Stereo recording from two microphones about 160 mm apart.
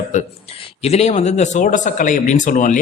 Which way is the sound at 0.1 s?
50° left (ahead or behind).